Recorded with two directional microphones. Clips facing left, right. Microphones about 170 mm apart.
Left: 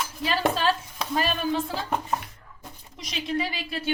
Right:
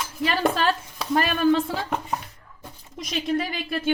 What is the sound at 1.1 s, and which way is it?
Speech, 60° right (ahead or behind).